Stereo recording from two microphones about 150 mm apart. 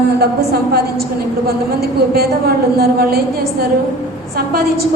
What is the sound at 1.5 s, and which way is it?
A woman's voice, 90° right.